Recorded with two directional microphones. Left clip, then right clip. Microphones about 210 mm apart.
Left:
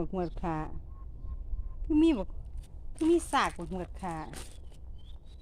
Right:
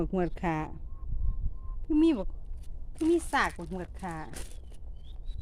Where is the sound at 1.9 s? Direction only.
Centre (ahead or behind).